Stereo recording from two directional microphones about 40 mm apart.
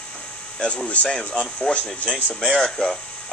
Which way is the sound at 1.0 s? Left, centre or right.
Left.